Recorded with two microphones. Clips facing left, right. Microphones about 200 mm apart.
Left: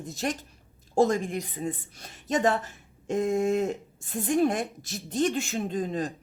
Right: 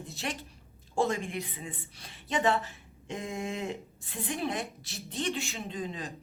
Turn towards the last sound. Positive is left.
turn(degrees=45)  # may be behind; listen again after turning